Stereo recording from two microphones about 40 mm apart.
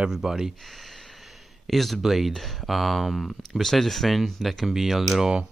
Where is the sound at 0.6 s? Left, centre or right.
Centre.